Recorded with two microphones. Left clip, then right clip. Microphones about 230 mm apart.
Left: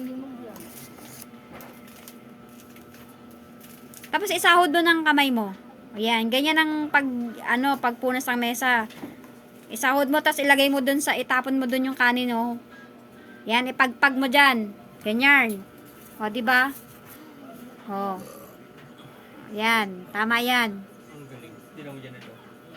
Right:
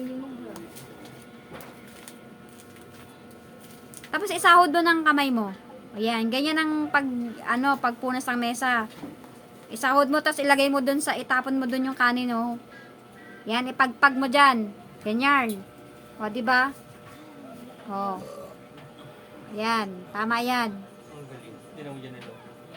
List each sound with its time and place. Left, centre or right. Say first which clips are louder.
4.2 s a woman's voice: right 1 dB; centre
13.5 s a woman's voice: left 2 dB; centre
17.9 s speech: left 1 dB; left
19.5 s a woman's voice: left 4 dB; centre